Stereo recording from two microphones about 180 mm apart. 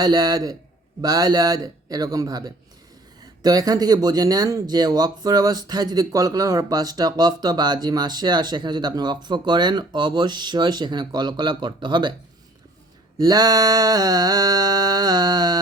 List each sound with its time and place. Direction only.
0.0 s speech: 20° right (ahead or behind)
13.1 s speech: 20° right (ahead or behind)